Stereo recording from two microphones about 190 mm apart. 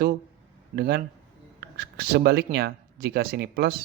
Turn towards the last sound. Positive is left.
turn(degrees=-55)  # may be behind; listen again after turning